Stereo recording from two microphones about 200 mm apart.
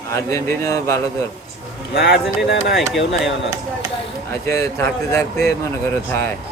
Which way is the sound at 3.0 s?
65° left (ahead or behind).